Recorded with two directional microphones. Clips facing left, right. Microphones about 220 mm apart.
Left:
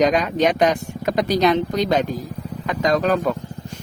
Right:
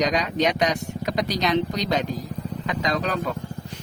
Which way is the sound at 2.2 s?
Centre (ahead or behind).